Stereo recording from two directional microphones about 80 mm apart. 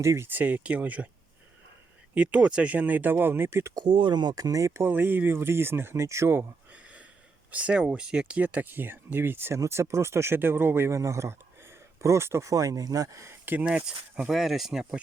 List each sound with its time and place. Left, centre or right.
0.0 s speech: right
0.3 s speech: right
2.1 s speech: centre; by 3.7 s right
3.8 s speech: right
6.7 s a sound: centre
7.5 s speech: centre
13.7 s speech: centre
14.3 s speech: centre